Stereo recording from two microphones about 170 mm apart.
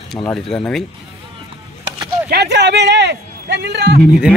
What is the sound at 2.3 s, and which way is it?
A man's voice, 85° right.